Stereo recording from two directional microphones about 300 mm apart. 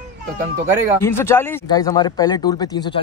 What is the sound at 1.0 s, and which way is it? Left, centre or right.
Speech, centre.